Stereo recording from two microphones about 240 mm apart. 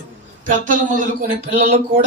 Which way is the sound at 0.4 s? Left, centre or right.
Right.